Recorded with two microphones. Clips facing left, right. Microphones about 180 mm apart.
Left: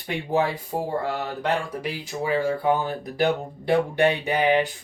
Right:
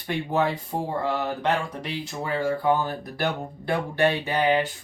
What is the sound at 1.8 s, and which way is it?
Speech, 10° left (ahead or behind).